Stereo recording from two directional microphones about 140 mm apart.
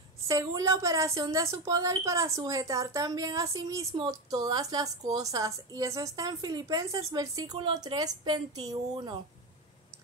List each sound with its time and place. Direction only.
0.3 s a woman's voice: 25° right (ahead or behind)